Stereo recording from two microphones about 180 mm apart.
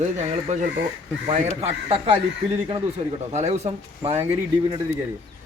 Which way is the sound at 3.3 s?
40° right (ahead or behind).